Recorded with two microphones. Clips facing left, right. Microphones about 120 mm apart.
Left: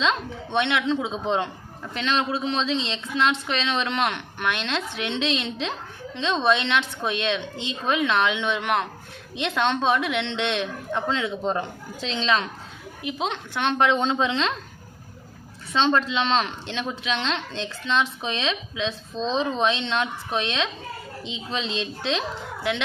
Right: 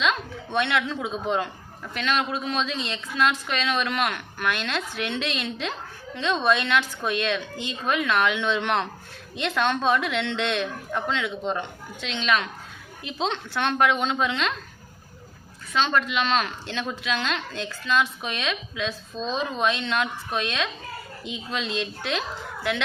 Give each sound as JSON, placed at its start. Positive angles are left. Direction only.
{"t": 0.0, "sound": "speech", "side_deg": 25}
{"t": 11.4, "sound": "a woman's voice", "side_deg": 35}
{"t": 13.0, "sound": "speech", "side_deg": 15}
{"t": 15.7, "sound": "speech", "side_deg": 25}